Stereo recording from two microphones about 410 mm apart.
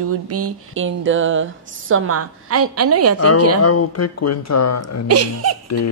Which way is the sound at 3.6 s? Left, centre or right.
Left.